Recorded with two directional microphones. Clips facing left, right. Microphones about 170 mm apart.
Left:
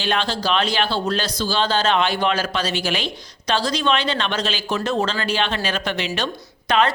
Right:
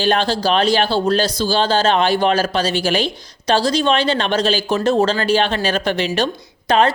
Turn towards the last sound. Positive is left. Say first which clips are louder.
# right 4 dB
turn(degrees=-35)  # may be behind; listen again after turning